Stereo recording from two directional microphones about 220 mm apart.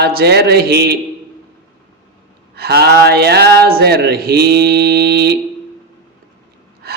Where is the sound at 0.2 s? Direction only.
45° right (ahead or behind).